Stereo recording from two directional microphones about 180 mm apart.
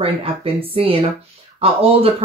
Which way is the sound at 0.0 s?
30° right (ahead or behind).